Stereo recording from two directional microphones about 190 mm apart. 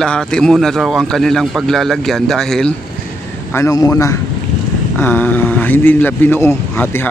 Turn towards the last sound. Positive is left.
turn(degrees=10)  # may be behind; listen again after turning